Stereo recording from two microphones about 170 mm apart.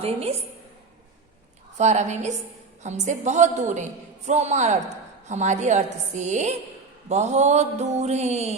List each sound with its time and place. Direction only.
0.0 s mantra: 35° right (ahead or behind)
1.8 s a woman's voice: 45° right (ahead or behind)
7.1 s mantra: 40° right (ahead or behind)